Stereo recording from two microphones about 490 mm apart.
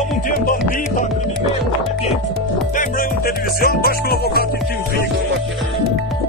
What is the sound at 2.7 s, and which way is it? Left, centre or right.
Music, centre.